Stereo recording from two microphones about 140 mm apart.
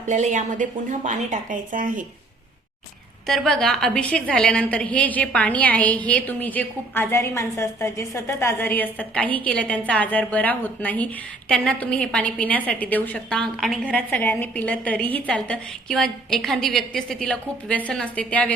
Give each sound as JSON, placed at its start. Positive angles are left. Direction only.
{"t": 0.1, "sound": "a woman's voice", "side_deg": -55}
{"t": 3.2, "sound": "a woman's voice", "side_deg": 5}
{"t": 13.9, "sound": "a woman's voice", "side_deg": 10}